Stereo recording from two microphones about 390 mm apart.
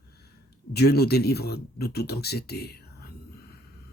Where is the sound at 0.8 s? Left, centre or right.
Left.